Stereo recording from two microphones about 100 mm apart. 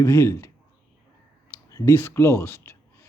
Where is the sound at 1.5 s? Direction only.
25° left (ahead or behind).